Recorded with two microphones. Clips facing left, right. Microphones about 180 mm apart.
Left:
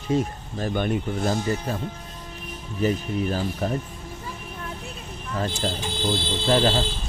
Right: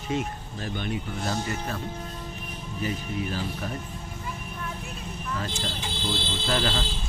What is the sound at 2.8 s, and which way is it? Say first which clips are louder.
Speech: left 7 dB; 45° left (ahead or behind).